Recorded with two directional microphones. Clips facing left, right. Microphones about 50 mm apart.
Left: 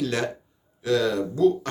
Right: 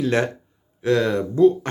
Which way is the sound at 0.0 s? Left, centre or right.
Right.